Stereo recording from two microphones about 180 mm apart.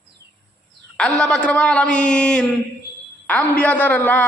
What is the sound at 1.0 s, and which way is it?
A man's voice, 5° left (ahead or behind).